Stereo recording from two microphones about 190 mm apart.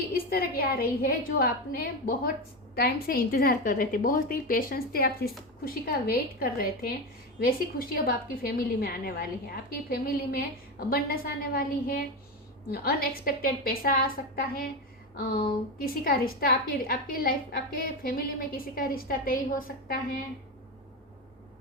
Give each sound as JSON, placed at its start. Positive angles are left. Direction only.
{"t": 0.0, "sound": "a woman's voice", "side_deg": 50}
{"t": 15.8, "sound": "a woman's voice", "side_deg": 50}